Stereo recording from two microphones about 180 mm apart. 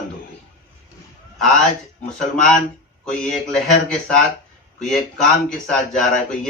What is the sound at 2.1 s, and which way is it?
Speech, 5° left (ahead or behind).